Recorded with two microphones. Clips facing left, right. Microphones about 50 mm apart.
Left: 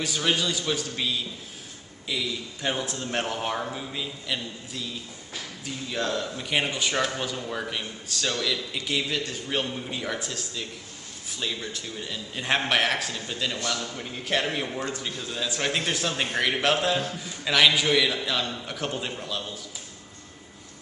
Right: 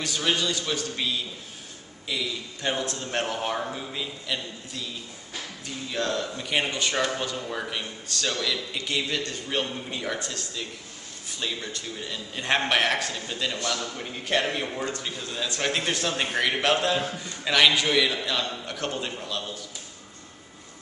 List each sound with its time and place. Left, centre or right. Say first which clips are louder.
0.0 s a man's voice: even; centre